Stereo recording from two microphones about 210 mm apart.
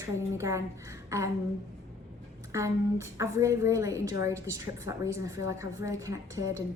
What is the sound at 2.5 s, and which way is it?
A woman's voice, 15° right (ahead or behind).